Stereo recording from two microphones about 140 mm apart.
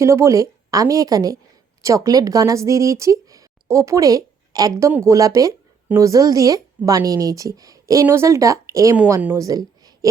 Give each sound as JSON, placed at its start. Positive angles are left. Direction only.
{"t": 0.0, "sound": "speech", "side_deg": -20}